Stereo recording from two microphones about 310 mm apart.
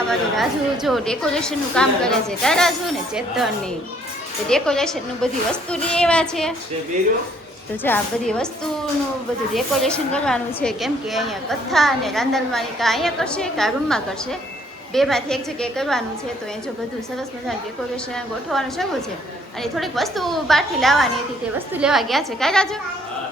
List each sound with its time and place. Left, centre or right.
0.1 s a woman's voice: centre
7.9 s a woman's voice: centre
9.5 s a woman's voice: centre
18.5 s a woman's voice: centre